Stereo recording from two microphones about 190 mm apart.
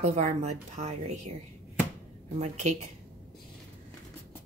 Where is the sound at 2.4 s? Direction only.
35° right (ahead or behind).